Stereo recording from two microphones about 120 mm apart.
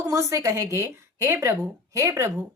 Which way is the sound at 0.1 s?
25° right (ahead or behind).